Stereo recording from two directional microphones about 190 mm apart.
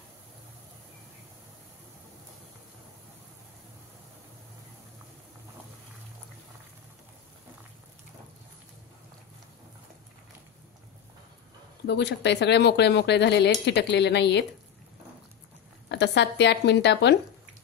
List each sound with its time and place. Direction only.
11.8 s speech: 65° left (ahead or behind)
15.9 s speech: 65° left (ahead or behind)